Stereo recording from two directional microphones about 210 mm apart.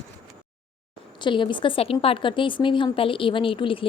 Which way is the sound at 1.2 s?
20° left (ahead or behind).